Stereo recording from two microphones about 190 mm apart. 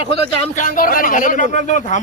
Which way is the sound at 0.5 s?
45° left (ahead or behind).